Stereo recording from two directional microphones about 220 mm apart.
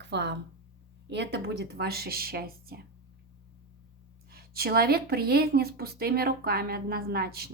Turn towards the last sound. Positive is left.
turn(degrees=-45)  # may be behind; listen again after turning